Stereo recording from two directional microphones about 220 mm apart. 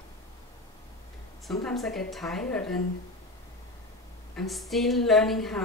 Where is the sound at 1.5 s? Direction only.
Centre (ahead or behind).